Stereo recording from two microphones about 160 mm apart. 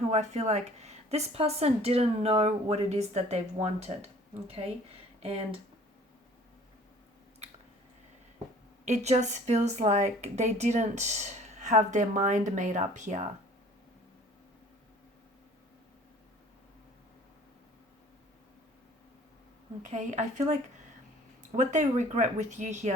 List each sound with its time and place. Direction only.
0.1 s speech: 45° right (ahead or behind)
7.4 s a sound: 40° right (ahead or behind)
8.8 s a woman's voice: 45° right (ahead or behind)
19.8 s a woman's voice: 50° right (ahead or behind)